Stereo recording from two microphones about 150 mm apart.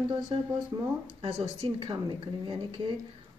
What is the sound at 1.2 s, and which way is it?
A woman's voice, 40° right (ahead or behind).